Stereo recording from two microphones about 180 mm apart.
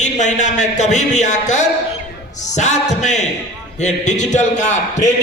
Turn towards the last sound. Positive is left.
turn(degrees=40)  # may be behind; listen again after turning